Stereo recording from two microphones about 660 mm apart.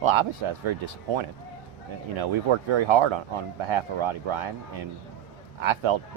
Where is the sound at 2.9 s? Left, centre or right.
Right.